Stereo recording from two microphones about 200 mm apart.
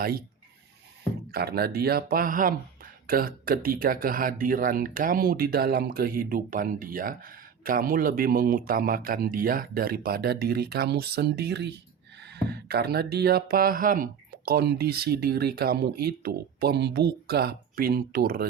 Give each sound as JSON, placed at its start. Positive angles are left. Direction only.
{"t": 1.3, "sound": "speech", "side_deg": -50}